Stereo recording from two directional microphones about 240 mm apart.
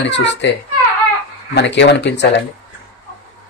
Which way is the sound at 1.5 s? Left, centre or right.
Left.